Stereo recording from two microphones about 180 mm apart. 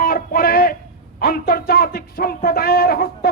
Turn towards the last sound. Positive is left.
turn(degrees=55)  # may be behind; listen again after turning